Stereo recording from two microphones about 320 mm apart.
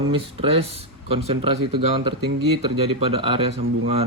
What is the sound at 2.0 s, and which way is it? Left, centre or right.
Speech, right.